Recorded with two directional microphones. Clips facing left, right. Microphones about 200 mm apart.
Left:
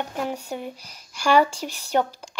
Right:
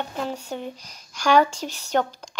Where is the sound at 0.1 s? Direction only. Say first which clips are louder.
Left 1 dB; 10° left (ahead or behind).